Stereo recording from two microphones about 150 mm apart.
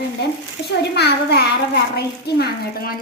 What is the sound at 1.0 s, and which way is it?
A child's voice, 90° left.